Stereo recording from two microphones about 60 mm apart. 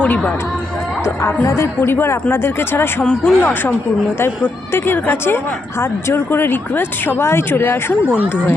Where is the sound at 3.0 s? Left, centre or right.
Centre.